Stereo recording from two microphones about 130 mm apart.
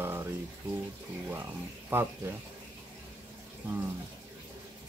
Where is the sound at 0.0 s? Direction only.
20° right (ahead or behind).